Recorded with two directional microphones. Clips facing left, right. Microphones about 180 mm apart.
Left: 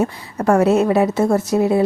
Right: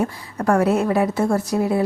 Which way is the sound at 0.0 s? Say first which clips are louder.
Left 3 dB; 25° left (ahead or behind).